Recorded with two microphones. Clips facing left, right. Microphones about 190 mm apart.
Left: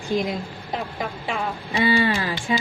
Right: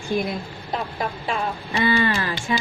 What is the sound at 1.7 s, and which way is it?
Speech, 15° left (ahead or behind).